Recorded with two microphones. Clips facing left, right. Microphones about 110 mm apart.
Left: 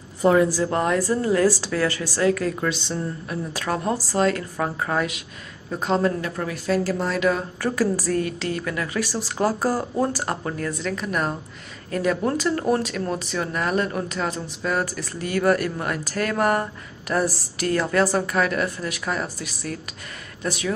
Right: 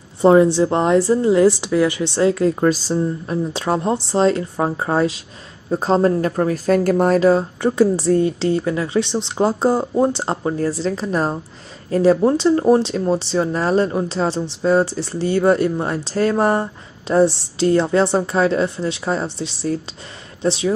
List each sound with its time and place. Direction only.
0.2 s speech: 25° right (ahead or behind)
2.6 s speech: 40° right (ahead or behind)
7.2 s speech: 30° right (ahead or behind)